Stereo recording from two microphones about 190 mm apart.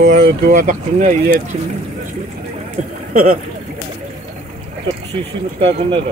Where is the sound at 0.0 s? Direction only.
45° right (ahead or behind).